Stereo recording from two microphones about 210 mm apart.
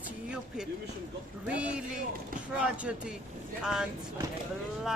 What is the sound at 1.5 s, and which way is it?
Speech, 5° right (ahead or behind).